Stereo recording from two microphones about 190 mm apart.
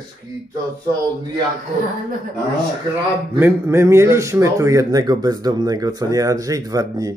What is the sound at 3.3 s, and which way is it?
A man's voice, 15° right (ahead or behind).